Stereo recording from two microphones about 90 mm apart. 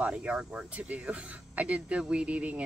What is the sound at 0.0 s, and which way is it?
A woman's voice, 10° right (ahead or behind).